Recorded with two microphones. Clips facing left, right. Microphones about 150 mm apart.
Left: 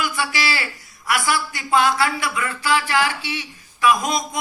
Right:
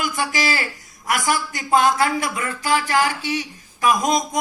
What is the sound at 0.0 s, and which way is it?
A man's voice, 45° right (ahead or behind).